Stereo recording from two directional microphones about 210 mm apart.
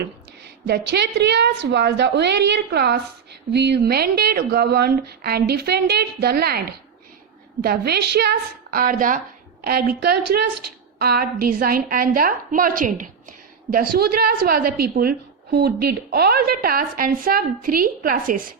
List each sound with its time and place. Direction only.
0.7 s a woman's voice: 50° right (ahead or behind)